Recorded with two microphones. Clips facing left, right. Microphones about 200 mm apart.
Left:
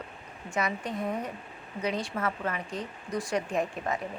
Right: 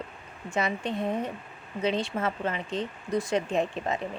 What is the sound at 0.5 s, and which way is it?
Speech, 25° right (ahead or behind).